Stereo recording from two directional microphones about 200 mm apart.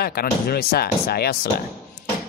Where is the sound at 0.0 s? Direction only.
50° left (ahead or behind).